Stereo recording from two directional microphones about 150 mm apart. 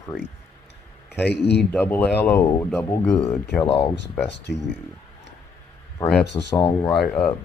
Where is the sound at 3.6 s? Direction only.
40° left (ahead or behind).